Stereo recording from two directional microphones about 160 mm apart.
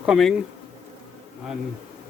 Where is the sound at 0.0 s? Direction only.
Centre (ahead or behind).